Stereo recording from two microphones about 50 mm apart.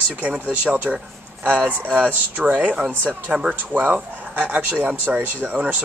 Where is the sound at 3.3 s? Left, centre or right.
Centre; by 5.3 s right.